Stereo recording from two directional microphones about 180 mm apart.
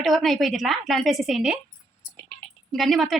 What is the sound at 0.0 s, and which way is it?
A woman's voice, centre (ahead or behind).